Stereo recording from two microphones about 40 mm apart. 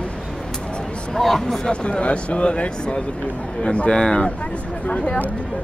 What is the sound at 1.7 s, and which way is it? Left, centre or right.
Speech, left.